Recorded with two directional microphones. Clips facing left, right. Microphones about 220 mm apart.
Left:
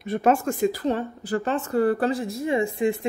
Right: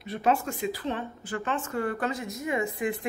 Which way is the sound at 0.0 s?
50° left (ahead or behind).